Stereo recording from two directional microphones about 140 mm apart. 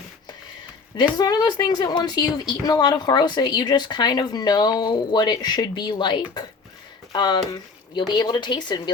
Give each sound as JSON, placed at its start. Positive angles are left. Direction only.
{"t": 0.9, "sound": "a woman's voice", "side_deg": 30}